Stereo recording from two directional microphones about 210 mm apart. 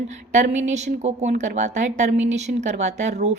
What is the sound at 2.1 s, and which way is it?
Speech, 60° right (ahead or behind).